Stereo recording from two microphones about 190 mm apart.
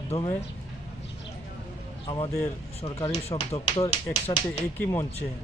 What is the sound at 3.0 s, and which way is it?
Speech, 35° left (ahead or behind).